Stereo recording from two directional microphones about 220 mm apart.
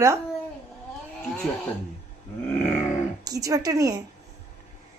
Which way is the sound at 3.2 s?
15° right (ahead or behind).